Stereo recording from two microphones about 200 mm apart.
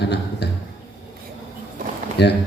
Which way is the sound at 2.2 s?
55° left (ahead or behind).